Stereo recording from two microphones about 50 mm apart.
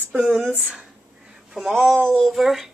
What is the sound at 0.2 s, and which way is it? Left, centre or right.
Speech, centre.